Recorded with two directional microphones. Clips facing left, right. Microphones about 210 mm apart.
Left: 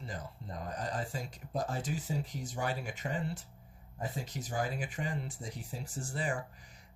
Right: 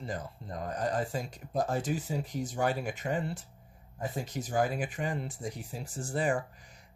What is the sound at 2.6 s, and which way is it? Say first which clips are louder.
Speech: right 5 dB; 55° right (ahead or behind).